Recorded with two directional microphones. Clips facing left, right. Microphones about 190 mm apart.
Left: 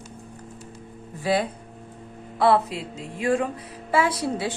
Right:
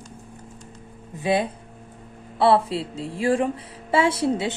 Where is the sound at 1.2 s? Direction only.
20° right (ahead or behind).